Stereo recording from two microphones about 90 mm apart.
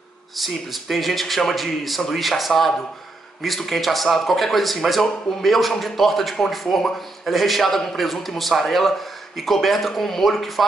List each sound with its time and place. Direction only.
0.4 s speech: centre (ahead or behind)